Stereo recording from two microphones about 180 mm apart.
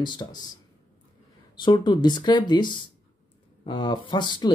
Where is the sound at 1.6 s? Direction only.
25° left (ahead or behind).